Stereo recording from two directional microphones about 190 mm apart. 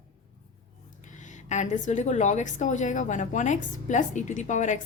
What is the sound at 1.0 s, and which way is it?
A woman's voice, 40° left (ahead or behind).